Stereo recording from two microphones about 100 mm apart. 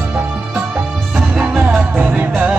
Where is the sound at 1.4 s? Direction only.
15° right (ahead or behind).